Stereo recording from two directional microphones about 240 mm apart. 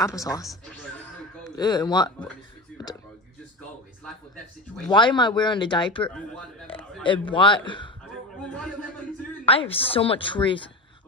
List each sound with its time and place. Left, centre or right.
0.0 s speech: centre
1.6 s speech: centre
4.8 s speech: centre
6.0 s speech: centre
7.0 s speech: centre
8.4 s a man's voice: centre
9.5 s speech: left